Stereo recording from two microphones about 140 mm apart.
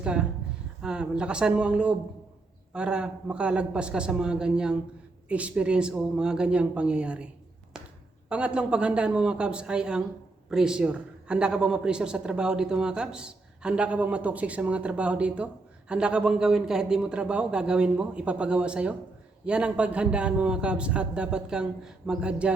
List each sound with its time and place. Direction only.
0.0 s a man's voice: 5° right (ahead or behind)
8.3 s a man's voice: 10° right (ahead or behind)